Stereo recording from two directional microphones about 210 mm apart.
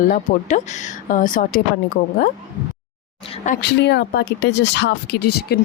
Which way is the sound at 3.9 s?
50° left (ahead or behind).